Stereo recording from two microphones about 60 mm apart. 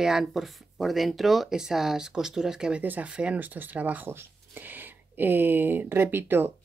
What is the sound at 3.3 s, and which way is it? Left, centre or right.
Speech, right.